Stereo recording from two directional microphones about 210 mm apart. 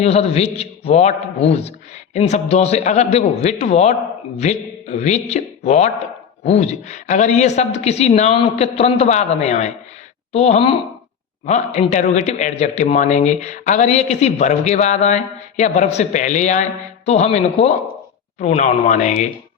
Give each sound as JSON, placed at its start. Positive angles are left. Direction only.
{"t": 0.0, "sound": "a man's voice", "side_deg": 30}